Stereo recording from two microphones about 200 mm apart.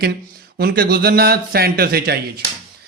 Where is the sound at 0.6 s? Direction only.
50° right (ahead or behind).